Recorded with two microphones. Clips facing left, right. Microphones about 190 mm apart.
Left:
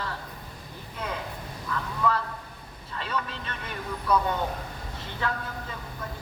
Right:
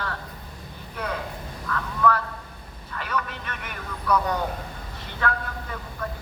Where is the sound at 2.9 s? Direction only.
25° left (ahead or behind).